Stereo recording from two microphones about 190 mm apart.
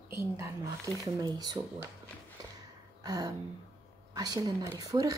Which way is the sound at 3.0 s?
20° right (ahead or behind).